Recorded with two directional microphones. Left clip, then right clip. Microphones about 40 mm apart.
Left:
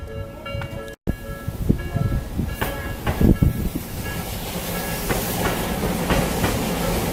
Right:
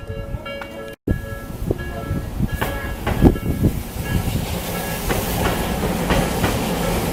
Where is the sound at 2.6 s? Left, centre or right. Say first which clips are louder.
Right 2 dB; centre.